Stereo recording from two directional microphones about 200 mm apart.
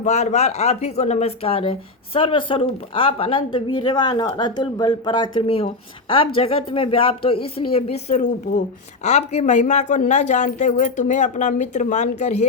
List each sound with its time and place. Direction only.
0.0 s a woman's voice: 35° left (ahead or behind)